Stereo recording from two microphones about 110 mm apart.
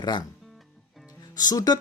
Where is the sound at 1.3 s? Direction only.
35° left (ahead or behind).